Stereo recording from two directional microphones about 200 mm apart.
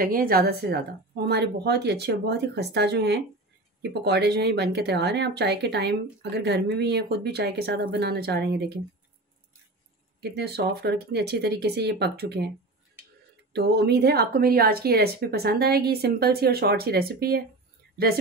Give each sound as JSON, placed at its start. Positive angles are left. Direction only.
{"t": 0.0, "sound": "speech", "side_deg": -45}
{"t": 10.2, "sound": "speech", "side_deg": -55}
{"t": 13.5, "sound": "speech", "side_deg": -55}